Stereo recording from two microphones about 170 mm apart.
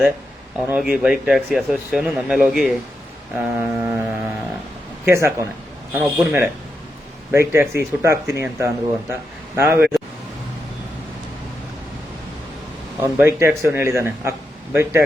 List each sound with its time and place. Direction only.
0.7 s speech: 5° right (ahead or behind)
5.0 s a man's voice: 15° right (ahead or behind)
13.0 s a man's voice: 15° right (ahead or behind)